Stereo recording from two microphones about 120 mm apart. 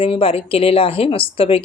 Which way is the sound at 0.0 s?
50° left (ahead or behind).